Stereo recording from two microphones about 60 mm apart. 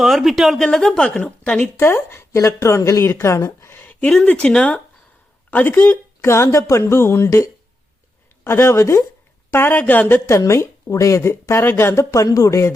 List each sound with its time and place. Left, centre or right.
0.0 s a woman's voice: centre
1.6 s speech: left
3.0 s speech: left
3.7 s a sound: left
4.3 s speech: centre
6.2 s speech: left
8.4 s speech: left
9.5 s a woman's voice: left
10.2 s speech: left
12.1 s speech: left